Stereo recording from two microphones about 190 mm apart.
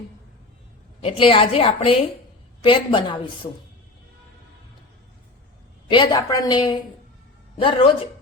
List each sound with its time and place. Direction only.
1.0 s a woman's voice: 30° left (ahead or behind)
5.9 s a woman's voice: 25° left (ahead or behind)